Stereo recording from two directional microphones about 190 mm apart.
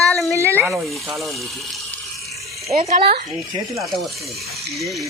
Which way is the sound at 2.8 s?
35° right (ahead or behind).